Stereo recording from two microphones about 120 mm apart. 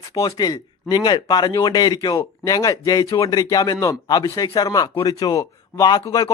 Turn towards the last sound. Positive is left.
turn(degrees=30)  # may be behind; listen again after turning